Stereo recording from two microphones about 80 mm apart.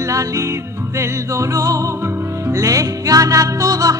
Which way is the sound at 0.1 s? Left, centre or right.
Right.